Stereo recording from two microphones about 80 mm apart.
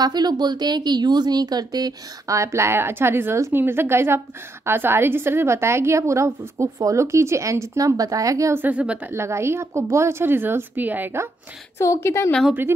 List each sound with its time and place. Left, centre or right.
0.0 s a woman's voice: right
2.3 s a woman's voice: right
8.5 s a woman's voice: centre
9.1 s a woman's voice: right
11.8 s a woman's voice: left